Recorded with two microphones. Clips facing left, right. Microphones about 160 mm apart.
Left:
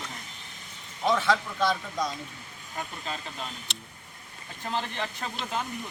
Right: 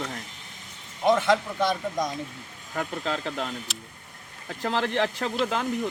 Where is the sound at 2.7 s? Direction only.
70° right (ahead or behind).